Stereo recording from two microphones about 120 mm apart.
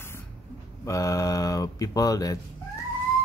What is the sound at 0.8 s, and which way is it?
Speech, 25° left (ahead or behind).